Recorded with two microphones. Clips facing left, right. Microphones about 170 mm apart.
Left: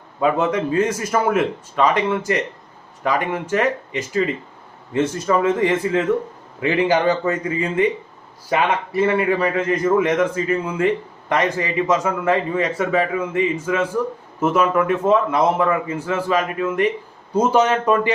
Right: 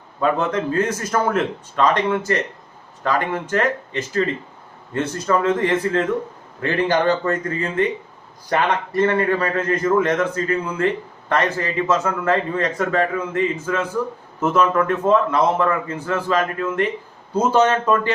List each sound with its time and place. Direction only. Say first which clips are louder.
0.2 s a man's voice: left 1 dB; 10° left (ahead or behind)